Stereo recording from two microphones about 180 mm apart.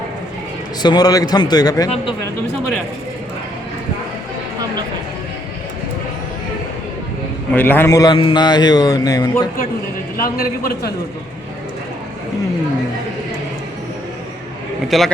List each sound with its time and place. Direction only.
0.8 s a man's voice: 25° left (ahead or behind)
7.5 s a man's voice: 10° left (ahead or behind)
10.2 s a man's voice: 55° left (ahead or behind)
14.8 s a man's voice: centre (ahead or behind)